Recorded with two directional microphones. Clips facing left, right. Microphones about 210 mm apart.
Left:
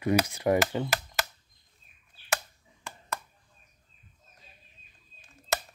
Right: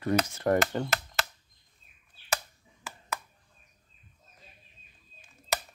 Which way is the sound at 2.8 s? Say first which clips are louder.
Even; 5° right (ahead or behind).